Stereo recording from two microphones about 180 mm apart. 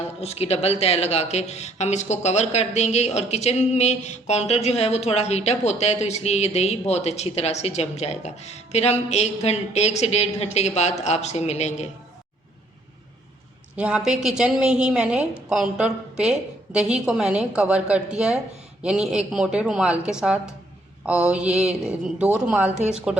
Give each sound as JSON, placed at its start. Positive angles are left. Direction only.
{"t": 0.2, "sound": "speech", "side_deg": 35}
{"t": 13.7, "sound": "a woman's voice", "side_deg": -5}